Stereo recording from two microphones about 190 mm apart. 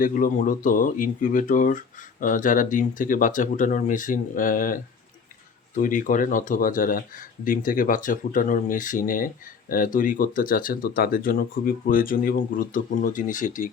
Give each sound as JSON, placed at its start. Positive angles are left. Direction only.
{"t": 0.0, "sound": "speech", "side_deg": 45}